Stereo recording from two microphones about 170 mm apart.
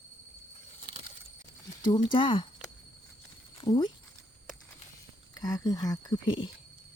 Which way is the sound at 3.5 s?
25° left (ahead or behind).